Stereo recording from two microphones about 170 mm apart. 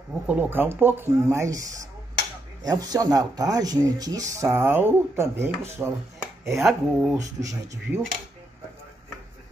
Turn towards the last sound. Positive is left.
turn(degrees=-20)  # may be behind; listen again after turning